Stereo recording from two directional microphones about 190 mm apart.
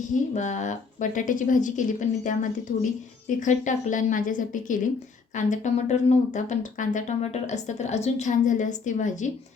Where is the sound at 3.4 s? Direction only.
40° left (ahead or behind).